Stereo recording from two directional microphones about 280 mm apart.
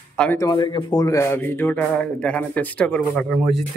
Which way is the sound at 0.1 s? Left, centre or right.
Centre.